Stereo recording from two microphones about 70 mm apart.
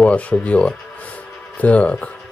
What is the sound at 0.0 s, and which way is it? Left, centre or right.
Speech, centre.